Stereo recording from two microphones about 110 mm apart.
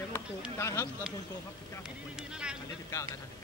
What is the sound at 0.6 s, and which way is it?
Speech, 25° left (ahead or behind).